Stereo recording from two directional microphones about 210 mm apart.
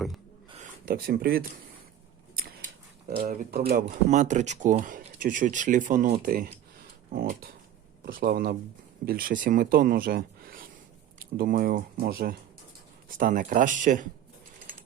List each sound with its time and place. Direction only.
0.6 s speech: 45° right (ahead or behind)
3.2 s speech: 45° right (ahead or behind)